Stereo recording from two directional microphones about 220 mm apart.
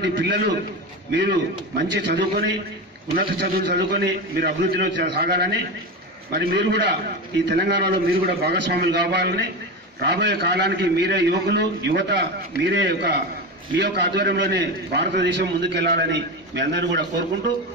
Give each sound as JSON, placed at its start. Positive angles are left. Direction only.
{"t": 0.0, "sound": "a man's voice", "side_deg": -50}